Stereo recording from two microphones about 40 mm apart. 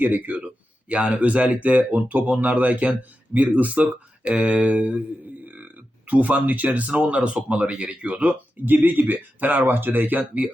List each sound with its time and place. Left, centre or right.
0.0 s speech: right
0.4 s speech: right
4.3 s mantra: right
6.1 s speech: right
7.5 s mantra: right
8.1 s speech: right
8.6 s speech: right